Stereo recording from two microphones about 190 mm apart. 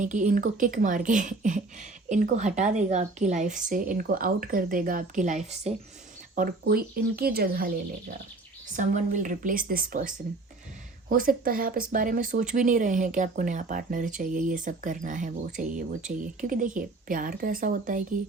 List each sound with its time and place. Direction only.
0.0 s a woman's voice: 40° right (ahead or behind)
6.3 s speech: 50° right (ahead or behind)
8.7 s speech: 40° right (ahead or behind)